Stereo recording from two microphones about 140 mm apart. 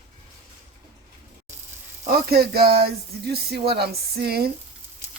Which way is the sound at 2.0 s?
90° right.